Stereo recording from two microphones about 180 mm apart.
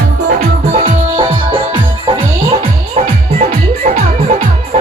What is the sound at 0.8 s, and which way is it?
Music, 30° right (ahead or behind).